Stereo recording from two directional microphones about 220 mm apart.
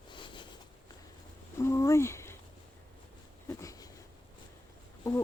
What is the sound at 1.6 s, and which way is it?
Speech, 10° left (ahead or behind).